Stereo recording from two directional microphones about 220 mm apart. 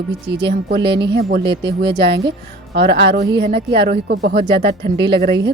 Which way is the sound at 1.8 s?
50° right (ahead or behind).